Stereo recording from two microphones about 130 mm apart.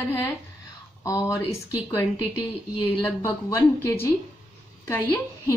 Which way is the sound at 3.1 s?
25° left (ahead or behind).